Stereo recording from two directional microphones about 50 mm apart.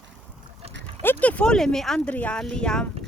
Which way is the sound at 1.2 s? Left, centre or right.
Left.